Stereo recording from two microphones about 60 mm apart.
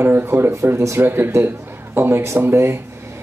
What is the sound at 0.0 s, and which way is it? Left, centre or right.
Speech, right.